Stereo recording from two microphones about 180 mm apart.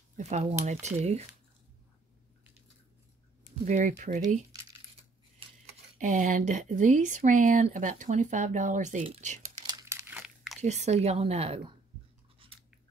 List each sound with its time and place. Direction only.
0.1 s a woman's voice: 40° right (ahead or behind)
3.6 s speech: 45° right (ahead or behind)
5.9 s speech: 45° right (ahead or behind)
9.7 s crumpling: 20° right (ahead or behind)
10.6 s a woman's voice: 40° right (ahead or behind)
12.4 s chewing: 30° right (ahead or behind)